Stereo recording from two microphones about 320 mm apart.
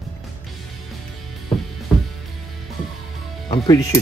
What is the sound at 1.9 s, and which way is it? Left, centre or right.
Music, centre.